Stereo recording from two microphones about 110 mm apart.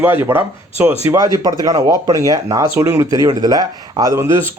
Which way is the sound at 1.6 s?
35° right (ahead or behind).